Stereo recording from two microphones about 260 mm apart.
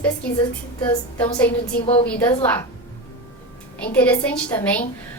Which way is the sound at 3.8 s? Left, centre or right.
Centre.